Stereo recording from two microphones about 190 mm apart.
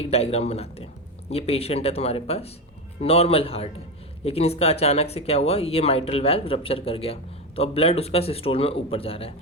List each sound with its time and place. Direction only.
0.0 s speech: 35° left (ahead or behind)